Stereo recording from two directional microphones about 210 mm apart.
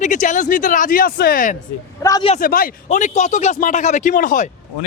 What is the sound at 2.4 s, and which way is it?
Speech, 45° left (ahead or behind).